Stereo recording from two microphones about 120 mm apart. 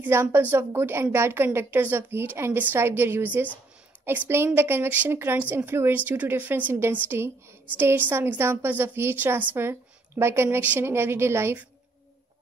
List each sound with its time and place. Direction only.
0.0 s speech: 20° right (ahead or behind)